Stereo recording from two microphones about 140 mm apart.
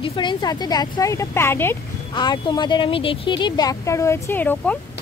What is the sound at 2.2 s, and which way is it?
Speech, 30° left (ahead or behind).